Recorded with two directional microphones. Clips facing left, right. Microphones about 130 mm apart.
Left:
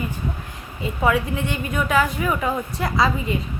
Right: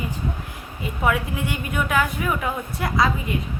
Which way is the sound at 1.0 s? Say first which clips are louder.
Left 2 dB; 5° right (ahead or behind).